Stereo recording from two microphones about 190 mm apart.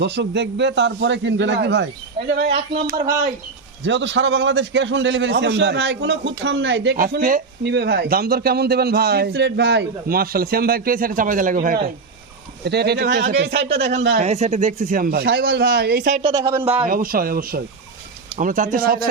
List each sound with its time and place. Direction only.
0.0 s a man's voice: 65° right (ahead or behind)
3.1 s speech: 20° right (ahead or behind)
3.8 s a man's voice: 70° right (ahead or behind)
6.9 s a man's voice: 45° right (ahead or behind)
7.6 s a man's voice: 60° right (ahead or behind); by 11.9 s 45° right (ahead or behind)
12.6 s speech: 60° right (ahead or behind)
14.2 s a man's voice: 35° right (ahead or behind); by 16.1 s 55° right (ahead or behind)
16.2 s speech: 20° right (ahead or behind)
16.9 s a man's voice: 50° right (ahead or behind)